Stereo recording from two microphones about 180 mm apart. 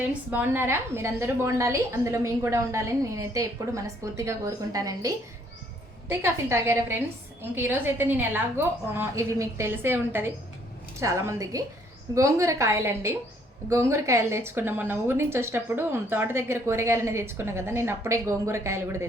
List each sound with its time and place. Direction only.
0.1 s a woman's voice: 10° right (ahead or behind)